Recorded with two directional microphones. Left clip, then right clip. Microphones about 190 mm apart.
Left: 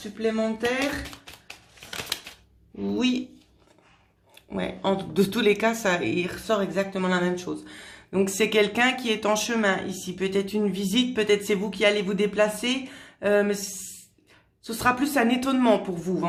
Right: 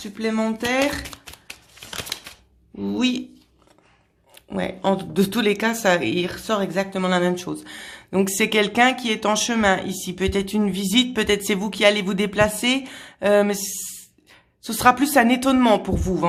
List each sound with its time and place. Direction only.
0.0 s a sound: 50° right (ahead or behind)
2.8 s speech: 40° right (ahead or behind)
4.4 s speech: 35° right (ahead or behind)